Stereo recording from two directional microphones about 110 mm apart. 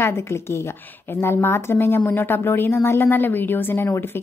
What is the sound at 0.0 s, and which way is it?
A woman's voice, 25° left (ahead or behind).